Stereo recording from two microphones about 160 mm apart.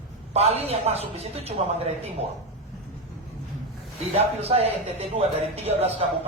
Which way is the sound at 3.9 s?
40° right (ahead or behind).